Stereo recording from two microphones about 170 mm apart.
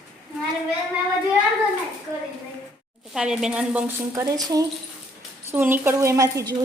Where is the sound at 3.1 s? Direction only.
5° right (ahead or behind).